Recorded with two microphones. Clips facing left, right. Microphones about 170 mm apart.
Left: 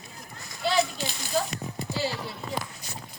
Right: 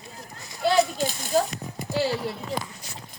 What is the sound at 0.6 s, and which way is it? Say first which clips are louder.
Children playing: right 5 dB; 45° right (ahead or behind).